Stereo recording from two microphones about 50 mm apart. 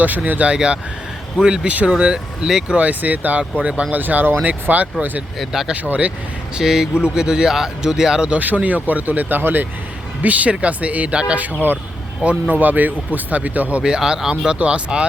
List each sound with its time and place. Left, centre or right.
0.3 s speech: right
1.6 s speech: right
1.9 s speech: centre
2.7 s speech: right
3.9 s speech: right
5.4 s speech: centre
5.7 s speech: right
6.6 s speech: centre
8.4 s speech: right
12.5 s speech: right
13.8 s speech: centre